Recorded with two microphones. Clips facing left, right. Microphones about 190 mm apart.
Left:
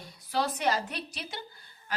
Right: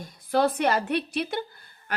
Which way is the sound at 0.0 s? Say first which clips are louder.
Right 8 dB; 50° right (ahead or behind).